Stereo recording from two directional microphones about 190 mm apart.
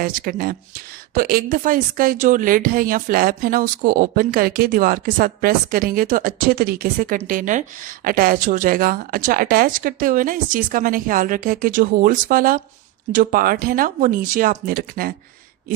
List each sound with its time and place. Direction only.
0.0 s speech: 50° right (ahead or behind)